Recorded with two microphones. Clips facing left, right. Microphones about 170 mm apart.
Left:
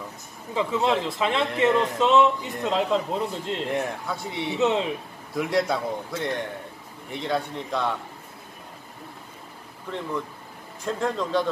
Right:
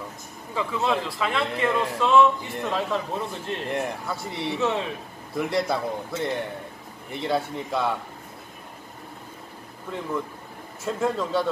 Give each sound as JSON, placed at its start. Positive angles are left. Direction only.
{"t": 0.6, "sound": "a man's voice", "side_deg": 20}
{"t": 3.7, "sound": "a man's voice", "side_deg": 0}
{"t": 4.6, "sound": "a man's voice", "side_deg": 20}
{"t": 5.3, "sound": "a man's voice", "side_deg": 0}
{"t": 10.8, "sound": "a man's voice", "side_deg": -5}